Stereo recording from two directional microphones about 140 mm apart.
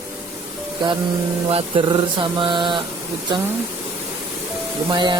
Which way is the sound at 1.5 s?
40° right (ahead or behind).